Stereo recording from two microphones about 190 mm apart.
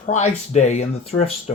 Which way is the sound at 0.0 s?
35° left (ahead or behind).